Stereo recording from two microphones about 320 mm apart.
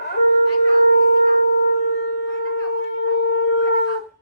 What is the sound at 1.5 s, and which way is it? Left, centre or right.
Shofar, left.